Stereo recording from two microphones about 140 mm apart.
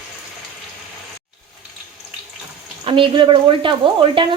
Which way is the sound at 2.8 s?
35° right (ahead or behind).